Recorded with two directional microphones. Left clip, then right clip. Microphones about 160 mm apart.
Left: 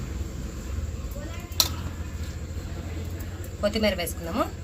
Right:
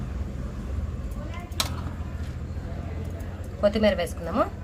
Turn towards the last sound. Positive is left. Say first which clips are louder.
# right 3 dB
turn(degrees=0)  # may be behind; listen again after turning